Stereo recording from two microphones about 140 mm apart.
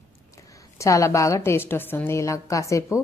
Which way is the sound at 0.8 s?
20° left (ahead or behind).